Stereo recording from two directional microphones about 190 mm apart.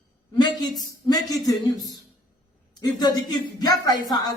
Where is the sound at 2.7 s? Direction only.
20° left (ahead or behind).